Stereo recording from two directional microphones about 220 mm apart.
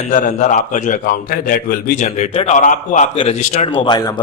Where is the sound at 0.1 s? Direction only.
35° left (ahead or behind).